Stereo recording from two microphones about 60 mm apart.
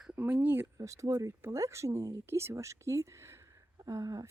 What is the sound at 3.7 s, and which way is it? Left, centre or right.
Speech, right.